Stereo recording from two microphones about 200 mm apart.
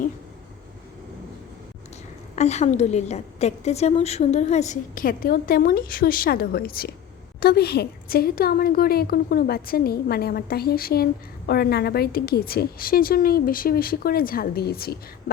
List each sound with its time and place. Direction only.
2.3 s a woman's voice: 35° left (ahead or behind); by 14.9 s 50° left (ahead or behind)